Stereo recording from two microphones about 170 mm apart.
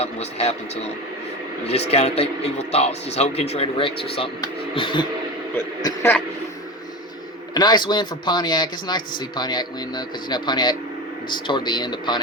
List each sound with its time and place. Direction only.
0.0 s speech: 40° left (ahead or behind)
5.5 s speech: 15° left (ahead or behind)
7.5 s speech: 25° left (ahead or behind)